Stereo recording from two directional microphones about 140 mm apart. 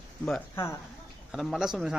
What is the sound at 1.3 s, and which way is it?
Speech, centre (ahead or behind).